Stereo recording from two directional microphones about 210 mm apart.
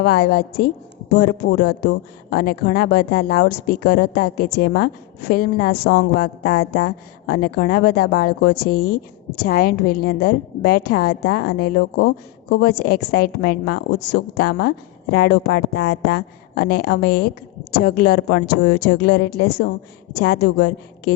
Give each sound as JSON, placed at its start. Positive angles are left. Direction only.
{"t": 0.0, "sound": "a woman's voice", "side_deg": 50}